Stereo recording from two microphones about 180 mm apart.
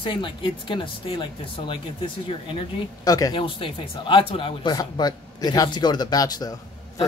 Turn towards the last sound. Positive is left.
turn(degrees=20)  # may be behind; listen again after turning